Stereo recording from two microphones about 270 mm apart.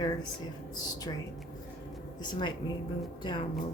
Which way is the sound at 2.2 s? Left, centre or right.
Centre.